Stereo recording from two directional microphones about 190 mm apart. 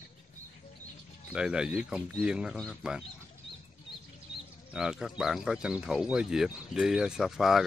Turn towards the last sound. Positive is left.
turn(degrees=0)  # may be behind; listen again after turning